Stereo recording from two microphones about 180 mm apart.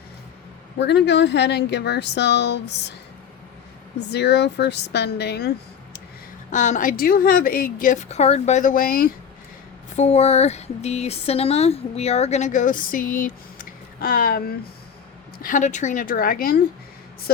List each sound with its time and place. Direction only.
0.8 s speech: 70° left (ahead or behind)
4.1 s speech: 70° left (ahead or behind)
6.5 s a woman's voice: 45° left (ahead or behind)
9.9 s a woman's voice: 40° left (ahead or behind); by 16.6 s 55° left (ahead or behind)